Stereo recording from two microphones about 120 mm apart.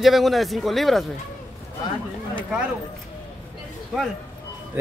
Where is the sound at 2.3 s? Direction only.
10° right (ahead or behind).